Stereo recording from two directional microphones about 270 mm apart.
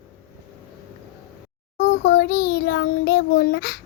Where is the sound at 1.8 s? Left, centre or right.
Left.